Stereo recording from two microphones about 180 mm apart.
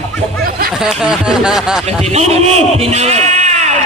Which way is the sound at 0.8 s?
5° right (ahead or behind).